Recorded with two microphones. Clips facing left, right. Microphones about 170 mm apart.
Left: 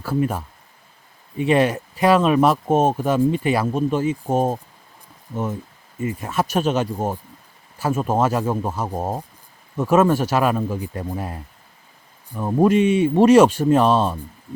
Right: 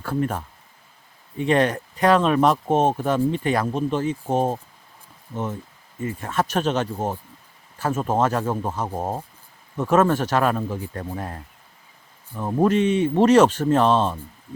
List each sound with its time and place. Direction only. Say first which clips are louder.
0.0 s speech: left 3 dB; 5° left (ahead or behind)